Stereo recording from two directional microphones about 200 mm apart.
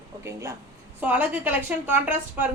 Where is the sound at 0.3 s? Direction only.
15° right (ahead or behind).